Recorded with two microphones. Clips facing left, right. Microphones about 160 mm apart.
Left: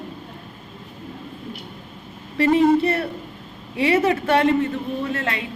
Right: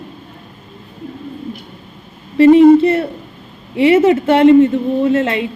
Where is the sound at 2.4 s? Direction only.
25° right (ahead or behind).